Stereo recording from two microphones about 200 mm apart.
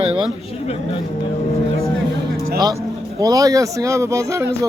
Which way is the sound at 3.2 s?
15° right (ahead or behind).